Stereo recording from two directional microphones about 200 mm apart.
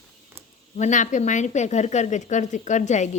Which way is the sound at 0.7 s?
35° left (ahead or behind).